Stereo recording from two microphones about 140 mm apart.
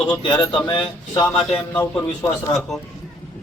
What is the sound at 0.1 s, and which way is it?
Speech, 35° left (ahead or behind).